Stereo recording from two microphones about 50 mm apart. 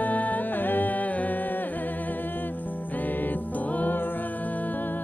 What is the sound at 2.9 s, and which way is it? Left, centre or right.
Music, left.